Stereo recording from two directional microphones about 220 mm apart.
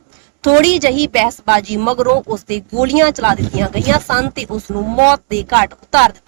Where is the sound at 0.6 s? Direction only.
15° right (ahead or behind).